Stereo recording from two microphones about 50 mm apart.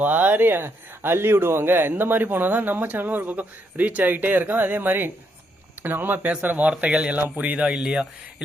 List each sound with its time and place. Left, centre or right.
0.0 s speech: right
6.7 s speech: right
7.7 s speech: centre